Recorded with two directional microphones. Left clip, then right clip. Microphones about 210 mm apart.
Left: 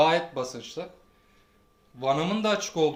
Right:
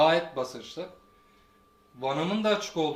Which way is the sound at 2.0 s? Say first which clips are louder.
Left 2 dB; 50° left (ahead or behind).